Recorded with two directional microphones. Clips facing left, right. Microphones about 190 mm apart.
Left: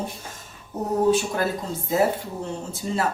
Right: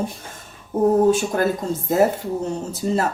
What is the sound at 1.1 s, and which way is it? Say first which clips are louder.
Speech: right 3 dB; 50° right (ahead or behind).